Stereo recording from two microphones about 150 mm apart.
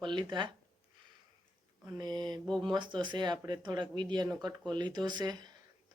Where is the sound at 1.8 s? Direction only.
25° right (ahead or behind).